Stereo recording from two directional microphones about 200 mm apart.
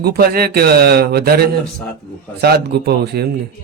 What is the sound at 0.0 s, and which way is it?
Speech, 50° right (ahead or behind).